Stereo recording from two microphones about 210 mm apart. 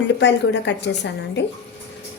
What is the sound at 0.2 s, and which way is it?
Speech, 55° left (ahead or behind).